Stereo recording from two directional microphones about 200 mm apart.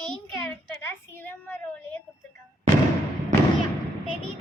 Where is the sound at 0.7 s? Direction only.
10° left (ahead or behind).